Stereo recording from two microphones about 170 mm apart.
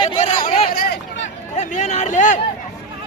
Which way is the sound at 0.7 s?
70° left (ahead or behind).